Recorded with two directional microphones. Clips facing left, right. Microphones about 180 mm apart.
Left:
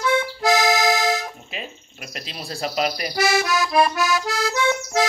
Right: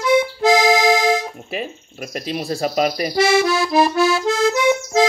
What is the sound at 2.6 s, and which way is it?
Speech, 40° right (ahead or behind).